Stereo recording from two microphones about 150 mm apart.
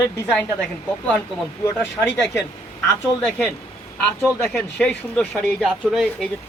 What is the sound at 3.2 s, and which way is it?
Speech, 10° left (ahead or behind).